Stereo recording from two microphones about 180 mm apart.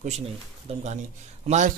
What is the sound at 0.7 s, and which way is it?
Speech, 35° right (ahead or behind).